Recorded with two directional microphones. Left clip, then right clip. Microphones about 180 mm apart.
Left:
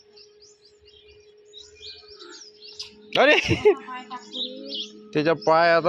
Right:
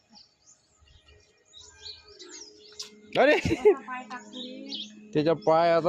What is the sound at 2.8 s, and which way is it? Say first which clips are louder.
A man's voice: left 3 dB; 5° right (ahead or behind).